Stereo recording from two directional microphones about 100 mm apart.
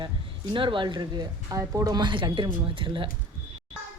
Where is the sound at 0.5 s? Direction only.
55° right (ahead or behind).